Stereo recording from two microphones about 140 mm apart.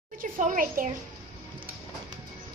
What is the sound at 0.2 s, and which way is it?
Speech, 75° right (ahead or behind).